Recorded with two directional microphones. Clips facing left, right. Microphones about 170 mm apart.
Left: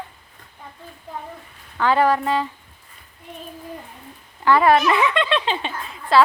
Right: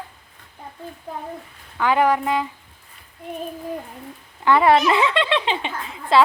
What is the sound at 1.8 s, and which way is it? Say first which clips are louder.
Speech: even; 15° right (ahead or behind).